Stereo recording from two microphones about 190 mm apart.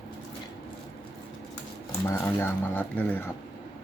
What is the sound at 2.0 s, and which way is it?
Speech, 15° left (ahead or behind).